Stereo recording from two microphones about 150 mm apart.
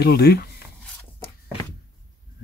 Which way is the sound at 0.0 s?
90° left.